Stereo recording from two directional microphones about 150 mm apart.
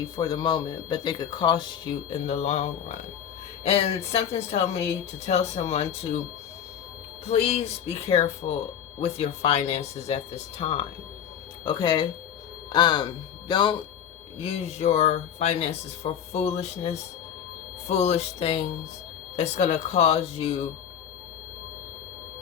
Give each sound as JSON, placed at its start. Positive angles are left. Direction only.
{"t": 0.0, "sound": "speech", "side_deg": 25}
{"t": 7.3, "sound": "speech", "side_deg": 40}